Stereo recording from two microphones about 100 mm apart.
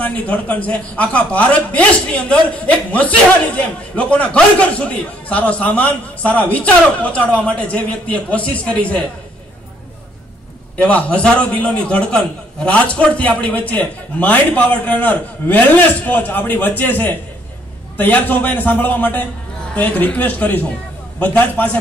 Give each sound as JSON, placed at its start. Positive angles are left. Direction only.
{"t": 0.0, "sound": "a man's voice", "side_deg": 15}
{"t": 10.8, "sound": "a man's voice", "side_deg": 10}